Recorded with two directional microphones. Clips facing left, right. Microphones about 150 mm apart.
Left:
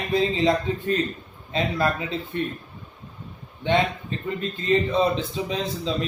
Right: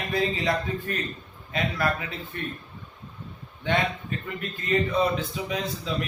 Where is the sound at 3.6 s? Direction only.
25° left (ahead or behind).